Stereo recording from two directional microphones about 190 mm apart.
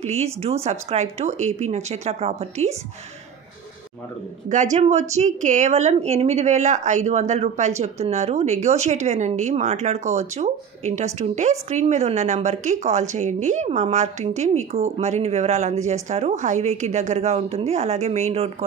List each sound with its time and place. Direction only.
0.0 s a woman's voice: 35° right (ahead or behind)
4.5 s a woman's voice: 40° right (ahead or behind)